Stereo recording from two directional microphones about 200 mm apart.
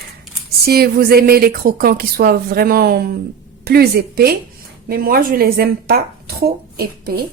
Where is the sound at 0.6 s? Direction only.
50° right (ahead or behind).